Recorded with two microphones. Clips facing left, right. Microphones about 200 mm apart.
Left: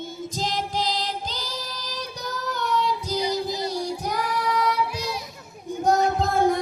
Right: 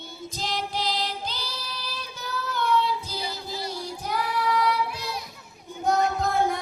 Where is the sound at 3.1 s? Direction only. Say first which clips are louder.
Left 8 dB; 15° left (ahead or behind).